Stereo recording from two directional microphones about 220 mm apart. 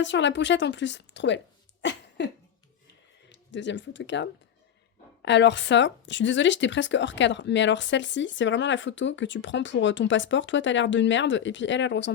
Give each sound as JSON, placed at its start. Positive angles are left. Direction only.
{"t": 0.0, "sound": "speech", "side_deg": 55}
{"t": 1.8, "sound": "cough", "side_deg": 50}
{"t": 3.2, "sound": "speech", "side_deg": 55}